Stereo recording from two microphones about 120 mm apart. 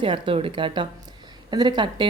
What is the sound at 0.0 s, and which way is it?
A woman's voice, 45° right (ahead or behind).